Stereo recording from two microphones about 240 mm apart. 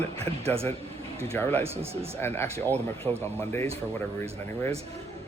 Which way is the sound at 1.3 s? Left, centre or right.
Centre.